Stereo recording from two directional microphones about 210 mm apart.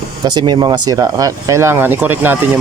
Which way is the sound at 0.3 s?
20° right (ahead or behind).